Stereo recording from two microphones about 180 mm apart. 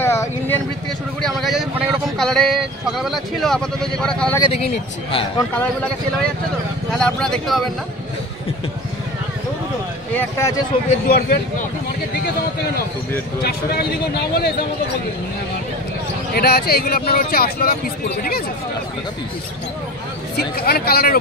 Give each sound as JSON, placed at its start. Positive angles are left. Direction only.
{"t": 0.0, "sound": "a sound", "side_deg": 15}
{"t": 1.2, "sound": "speech", "side_deg": 0}
{"t": 4.4, "sound": "a man's voice", "side_deg": 35}
{"t": 5.5, "sound": "a man's voice", "side_deg": 10}
{"t": 6.9, "sound": "speech", "side_deg": 5}
{"t": 11.1, "sound": "speech", "side_deg": 60}
{"t": 13.4, "sound": "speech", "side_deg": 60}
{"t": 16.3, "sound": "speech", "side_deg": 60}
{"t": 20.3, "sound": "speech", "side_deg": 60}